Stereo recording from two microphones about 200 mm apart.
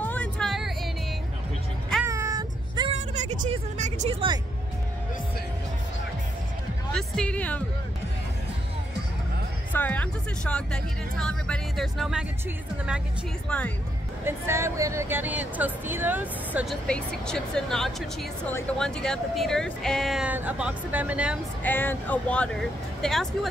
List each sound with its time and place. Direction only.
0.0 s music: 5° left (ahead or behind)
2.0 s child singing: 15° right (ahead or behind)
3.3 s speech: 35° right (ahead or behind)
6.9 s speech: 5° left (ahead or behind)
9.7 s speech: 10° left (ahead or behind)
14.2 s speech: 15° right (ahead or behind)
16.8 s speech: 5° left (ahead or behind)
21.6 s speech: 10° left (ahead or behind)